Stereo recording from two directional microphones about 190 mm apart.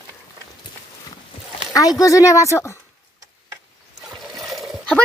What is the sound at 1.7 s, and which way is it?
Speech, 20° left (ahead or behind).